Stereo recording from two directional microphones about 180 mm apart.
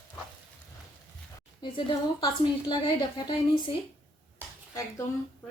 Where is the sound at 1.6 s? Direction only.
25° left (ahead or behind).